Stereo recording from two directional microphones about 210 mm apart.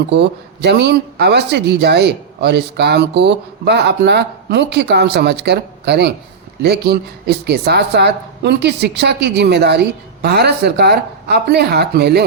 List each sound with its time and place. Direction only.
0.1 s speech: 55° right (ahead or behind)